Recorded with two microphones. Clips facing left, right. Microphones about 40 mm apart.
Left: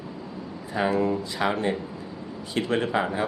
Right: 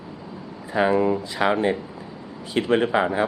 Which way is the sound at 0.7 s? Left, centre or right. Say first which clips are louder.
Right 4 dB; centre.